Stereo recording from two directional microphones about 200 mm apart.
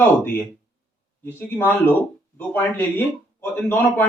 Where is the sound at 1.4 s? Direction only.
10° left (ahead or behind).